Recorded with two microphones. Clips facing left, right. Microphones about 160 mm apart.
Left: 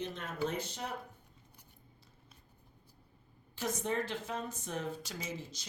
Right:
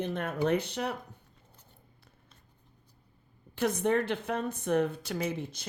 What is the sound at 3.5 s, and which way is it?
A woman's voice, 60° right (ahead or behind).